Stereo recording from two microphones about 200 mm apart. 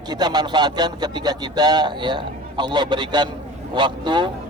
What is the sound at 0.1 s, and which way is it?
A man's voice, 20° right (ahead or behind).